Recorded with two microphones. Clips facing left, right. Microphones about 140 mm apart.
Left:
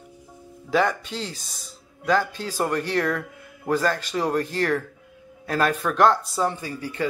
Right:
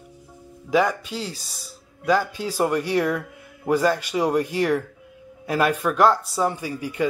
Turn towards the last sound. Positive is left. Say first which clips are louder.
# right 3 dB
turn(degrees=-10)  # may be behind; listen again after turning